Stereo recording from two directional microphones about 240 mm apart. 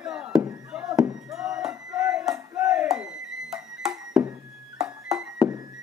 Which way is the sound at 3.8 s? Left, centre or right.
Centre.